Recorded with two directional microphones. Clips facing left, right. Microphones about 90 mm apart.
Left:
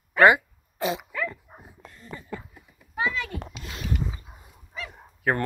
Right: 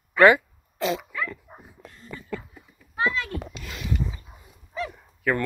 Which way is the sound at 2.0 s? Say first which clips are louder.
Right 2 dB; 25° left (ahead or behind).